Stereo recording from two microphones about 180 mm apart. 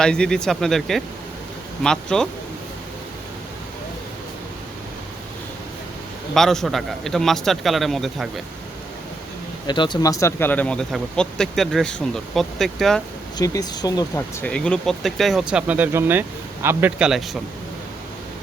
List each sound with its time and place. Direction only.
0.0 s speech: 5° left (ahead or behind)
6.3 s speech: centre (ahead or behind)
9.6 s speech: 25° left (ahead or behind); by 13.0 s centre (ahead or behind)
13.4 s speech: 20° left (ahead or behind)
14.4 s speech: 5° left (ahead or behind)